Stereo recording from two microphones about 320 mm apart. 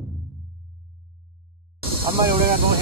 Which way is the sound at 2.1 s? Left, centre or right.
Centre.